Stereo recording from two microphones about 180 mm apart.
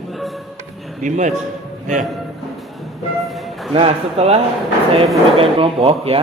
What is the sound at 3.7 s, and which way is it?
Speech, 35° right (ahead or behind).